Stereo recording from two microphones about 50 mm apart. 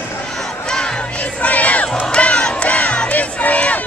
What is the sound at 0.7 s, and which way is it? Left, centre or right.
Battle cry, centre.